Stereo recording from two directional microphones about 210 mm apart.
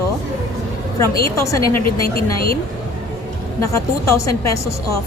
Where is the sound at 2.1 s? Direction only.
45° left (ahead or behind).